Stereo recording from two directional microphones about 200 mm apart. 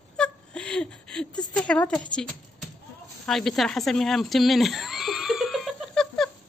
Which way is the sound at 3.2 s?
Centre (ahead or behind).